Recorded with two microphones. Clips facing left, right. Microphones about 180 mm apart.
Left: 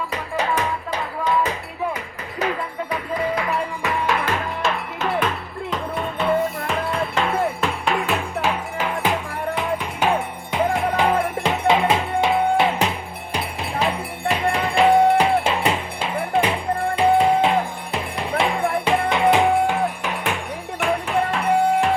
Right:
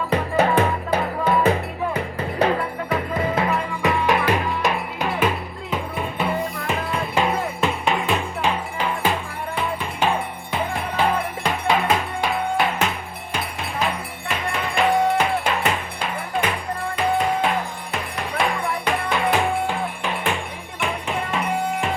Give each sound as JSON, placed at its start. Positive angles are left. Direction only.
{"t": 0.1, "sound": "music", "side_deg": -30}
{"t": 14.9, "sound": "music", "side_deg": 55}
{"t": 15.4, "sound": "music", "side_deg": 30}